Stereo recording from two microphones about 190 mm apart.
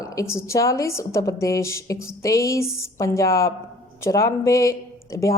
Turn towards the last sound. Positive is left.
turn(degrees=15)  # may be behind; listen again after turning